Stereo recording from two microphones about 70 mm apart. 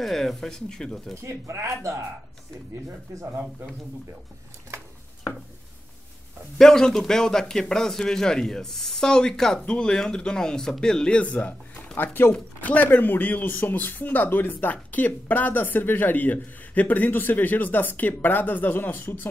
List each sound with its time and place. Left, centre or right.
0.0 s speech: centre
1.1 s speech: right
6.6 s a man's voice: centre; by 19.2 s left